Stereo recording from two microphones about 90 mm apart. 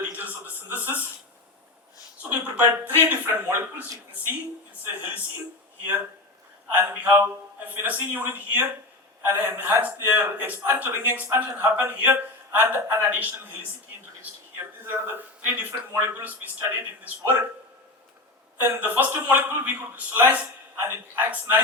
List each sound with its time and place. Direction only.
0.1 s a sound: 20° right (ahead or behind)
2.3 s a man's voice: 15° right (ahead or behind)
6.7 s a man's voice: 20° right (ahead or behind)
14.8 s a man's voice: 25° right (ahead or behind)
18.6 s a man's voice: 20° right (ahead or behind)